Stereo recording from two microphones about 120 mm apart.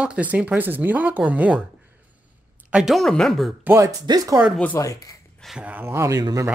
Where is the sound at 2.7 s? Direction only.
Centre (ahead or behind).